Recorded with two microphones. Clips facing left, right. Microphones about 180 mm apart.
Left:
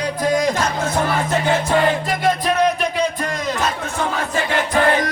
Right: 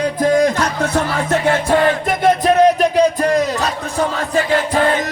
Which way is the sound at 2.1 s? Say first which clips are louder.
Right 5 dB; 45° right (ahead or behind).